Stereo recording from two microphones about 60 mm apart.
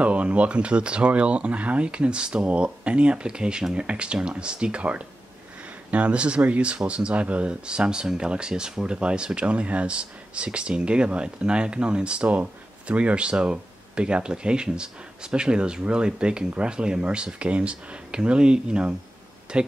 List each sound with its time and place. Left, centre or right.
0.0 s speech: right